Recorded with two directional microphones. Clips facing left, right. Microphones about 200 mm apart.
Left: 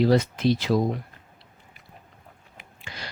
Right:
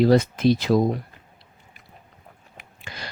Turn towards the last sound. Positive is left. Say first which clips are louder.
# right 2 dB
turn(degrees=-50)  # may be behind; listen again after turning